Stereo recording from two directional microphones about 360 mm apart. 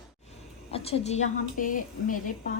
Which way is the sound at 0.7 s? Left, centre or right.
Centre.